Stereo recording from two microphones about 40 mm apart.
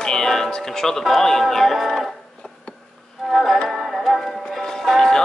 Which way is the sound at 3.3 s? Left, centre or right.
Centre.